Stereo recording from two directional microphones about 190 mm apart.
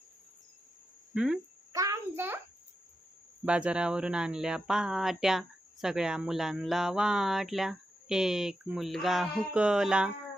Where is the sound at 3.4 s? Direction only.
5° right (ahead or behind).